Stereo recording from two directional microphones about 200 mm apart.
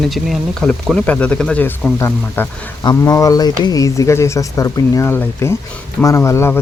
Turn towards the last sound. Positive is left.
turn(degrees=15)  # may be behind; listen again after turning